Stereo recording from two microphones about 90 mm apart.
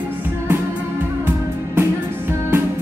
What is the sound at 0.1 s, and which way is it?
Music, 25° right (ahead or behind).